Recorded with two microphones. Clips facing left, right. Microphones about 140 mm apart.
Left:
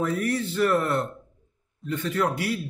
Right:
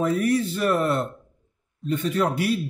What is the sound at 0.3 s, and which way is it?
A man's voice, 15° right (ahead or behind).